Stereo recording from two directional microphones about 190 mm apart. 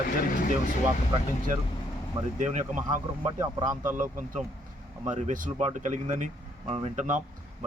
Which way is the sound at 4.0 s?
40° right (ahead or behind).